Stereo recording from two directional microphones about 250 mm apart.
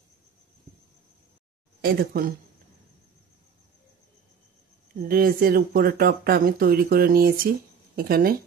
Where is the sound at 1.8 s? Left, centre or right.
Right.